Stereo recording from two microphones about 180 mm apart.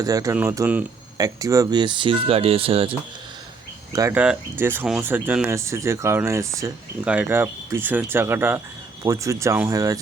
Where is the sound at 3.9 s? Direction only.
20° right (ahead or behind).